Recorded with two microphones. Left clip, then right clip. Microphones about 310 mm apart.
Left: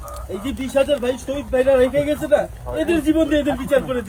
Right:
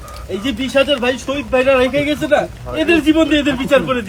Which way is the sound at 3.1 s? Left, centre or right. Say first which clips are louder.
Right 4 dB; right.